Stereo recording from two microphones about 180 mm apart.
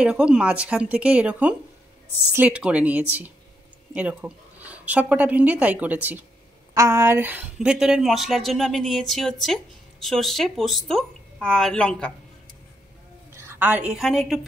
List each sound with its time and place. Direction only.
0.0 s a woman's voice: 5° right (ahead or behind)
13.4 s a woman's voice: 10° right (ahead or behind)